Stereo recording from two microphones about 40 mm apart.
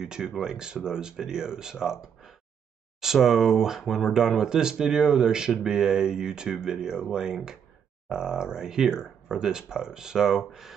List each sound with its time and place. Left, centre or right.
0.0 s speech: centre